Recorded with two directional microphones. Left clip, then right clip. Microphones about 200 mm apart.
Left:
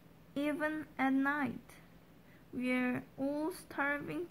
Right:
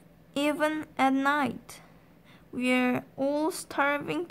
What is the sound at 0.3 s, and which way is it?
A woman's voice, 30° right (ahead or behind).